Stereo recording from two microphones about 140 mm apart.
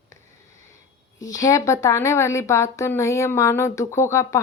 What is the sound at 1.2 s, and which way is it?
A woman's voice, 25° left (ahead or behind).